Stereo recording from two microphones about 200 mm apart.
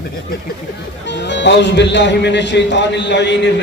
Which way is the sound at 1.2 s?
60° left (ahead or behind).